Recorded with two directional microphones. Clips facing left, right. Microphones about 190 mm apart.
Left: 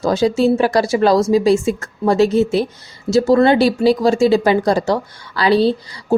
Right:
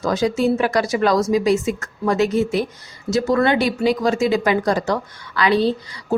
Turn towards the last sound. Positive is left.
turn(degrees=30)  # may be behind; listen again after turning